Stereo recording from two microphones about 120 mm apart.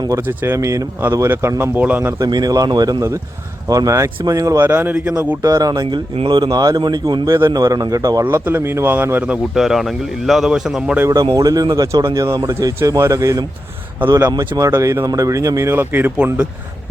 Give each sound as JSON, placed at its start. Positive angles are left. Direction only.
{"t": 0.2, "sound": "speech", "side_deg": -20}
{"t": 2.2, "sound": "speech", "side_deg": -30}
{"t": 4.6, "sound": "speech", "side_deg": -15}
{"t": 5.4, "sound": "speech", "side_deg": -30}
{"t": 8.2, "sound": "speech", "side_deg": -15}
{"t": 11.0, "sound": "speech", "side_deg": -30}